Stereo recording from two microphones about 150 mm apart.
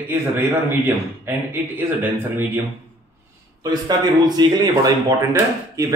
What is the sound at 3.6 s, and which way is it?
A man's voice, 25° right (ahead or behind).